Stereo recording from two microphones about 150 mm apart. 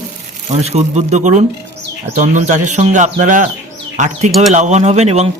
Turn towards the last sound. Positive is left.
turn(degrees=-45)  # may be behind; listen again after turning